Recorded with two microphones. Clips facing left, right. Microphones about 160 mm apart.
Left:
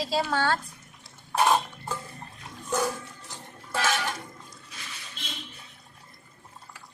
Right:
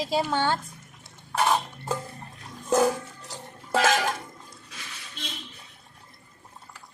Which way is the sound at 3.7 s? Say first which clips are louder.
Right 5 dB; 90° right.